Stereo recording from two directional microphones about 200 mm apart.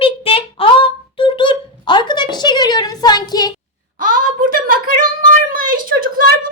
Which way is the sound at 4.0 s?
45° right (ahead or behind).